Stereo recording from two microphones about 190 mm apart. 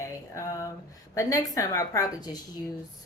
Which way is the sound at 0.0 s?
15° left (ahead or behind).